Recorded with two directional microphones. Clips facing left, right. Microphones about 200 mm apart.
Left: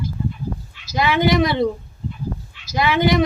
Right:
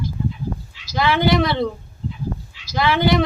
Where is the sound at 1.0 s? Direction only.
20° left (ahead or behind).